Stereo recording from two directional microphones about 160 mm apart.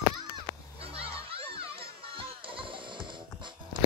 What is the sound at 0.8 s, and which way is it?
Children playing, 35° right (ahead or behind).